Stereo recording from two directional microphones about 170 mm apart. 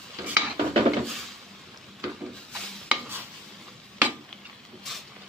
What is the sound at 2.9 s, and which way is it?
Stir, 10° right (ahead or behind).